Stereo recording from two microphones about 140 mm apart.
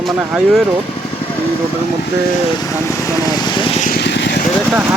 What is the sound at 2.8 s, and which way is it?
Vehicle, 20° left (ahead or behind).